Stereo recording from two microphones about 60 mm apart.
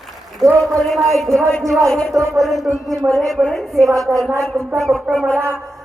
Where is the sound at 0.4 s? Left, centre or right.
Centre.